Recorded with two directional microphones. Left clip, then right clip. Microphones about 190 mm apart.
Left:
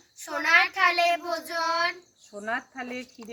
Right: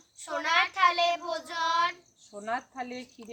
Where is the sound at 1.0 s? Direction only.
Centre (ahead or behind).